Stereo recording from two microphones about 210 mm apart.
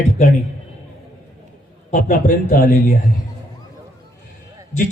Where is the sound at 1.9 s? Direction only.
35° left (ahead or behind).